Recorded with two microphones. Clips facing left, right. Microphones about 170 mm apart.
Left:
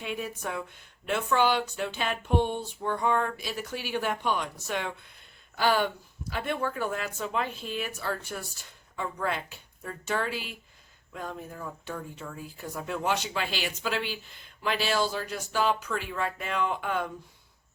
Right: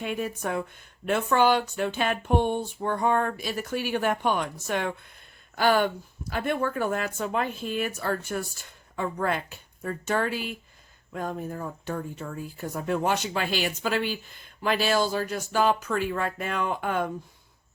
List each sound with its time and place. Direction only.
0.0 s speech: 50° right (ahead or behind)